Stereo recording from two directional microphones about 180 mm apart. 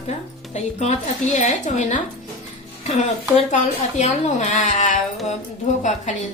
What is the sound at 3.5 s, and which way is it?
Speech, 40° left (ahead or behind).